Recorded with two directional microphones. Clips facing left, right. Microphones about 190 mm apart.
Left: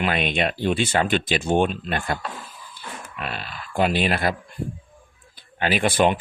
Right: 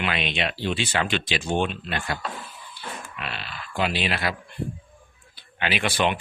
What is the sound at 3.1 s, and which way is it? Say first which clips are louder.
Speech: left 3 dB; 45° left (ahead or behind).